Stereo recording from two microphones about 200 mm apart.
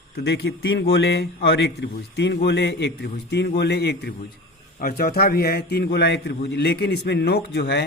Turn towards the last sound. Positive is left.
turn(degrees=60)  # may be behind; listen again after turning